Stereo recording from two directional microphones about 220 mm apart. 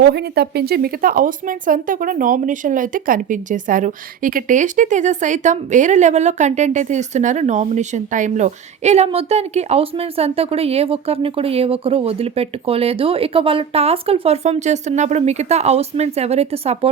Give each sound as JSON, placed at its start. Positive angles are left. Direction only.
{"t": 0.0, "sound": "speech", "side_deg": -45}